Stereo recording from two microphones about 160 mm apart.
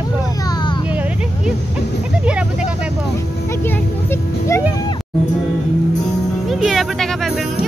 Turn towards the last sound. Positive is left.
turn(degrees=0)  # may be behind; listen again after turning